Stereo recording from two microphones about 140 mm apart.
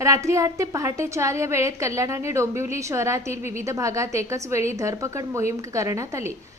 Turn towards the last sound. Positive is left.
turn(degrees=-20)  # may be behind; listen again after turning